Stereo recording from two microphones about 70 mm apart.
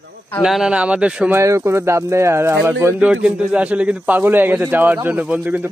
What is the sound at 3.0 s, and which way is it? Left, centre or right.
A man's voice, centre.